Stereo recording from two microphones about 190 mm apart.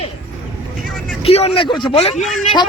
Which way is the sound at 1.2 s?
30° left (ahead or behind).